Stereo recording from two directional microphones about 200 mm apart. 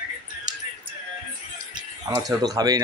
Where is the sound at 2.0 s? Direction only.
20° right (ahead or behind).